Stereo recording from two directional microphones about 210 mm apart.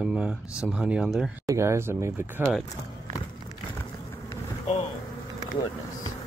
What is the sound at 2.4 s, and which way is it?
Speech, centre (ahead or behind).